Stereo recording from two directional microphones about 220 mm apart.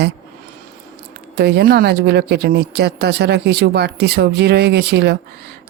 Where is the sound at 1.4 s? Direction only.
45° right (ahead or behind).